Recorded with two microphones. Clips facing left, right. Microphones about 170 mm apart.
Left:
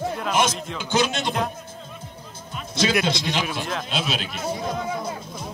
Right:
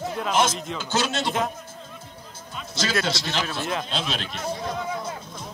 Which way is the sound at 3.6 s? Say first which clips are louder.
Right 1 dB; 5° right (ahead or behind).